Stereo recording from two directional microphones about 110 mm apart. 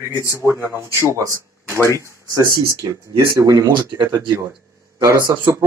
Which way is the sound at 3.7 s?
45° right (ahead or behind).